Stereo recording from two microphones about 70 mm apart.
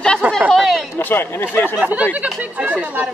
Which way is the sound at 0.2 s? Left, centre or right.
Right.